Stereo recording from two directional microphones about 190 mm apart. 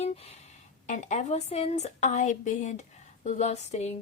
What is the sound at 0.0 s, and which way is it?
A woman's voice, 35° left (ahead or behind).